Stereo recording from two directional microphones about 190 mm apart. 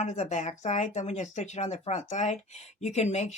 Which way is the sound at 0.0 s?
40° left (ahead or behind).